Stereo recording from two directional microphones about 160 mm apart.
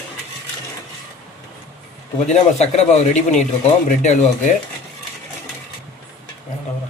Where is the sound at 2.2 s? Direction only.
45° left (ahead or behind).